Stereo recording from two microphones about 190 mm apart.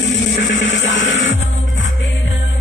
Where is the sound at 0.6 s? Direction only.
75° left (ahead or behind).